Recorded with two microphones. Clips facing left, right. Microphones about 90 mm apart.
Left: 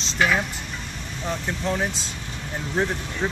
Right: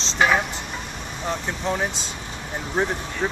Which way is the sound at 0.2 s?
25° right (ahead or behind).